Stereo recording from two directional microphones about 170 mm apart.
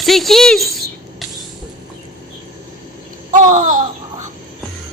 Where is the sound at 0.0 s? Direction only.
Centre (ahead or behind).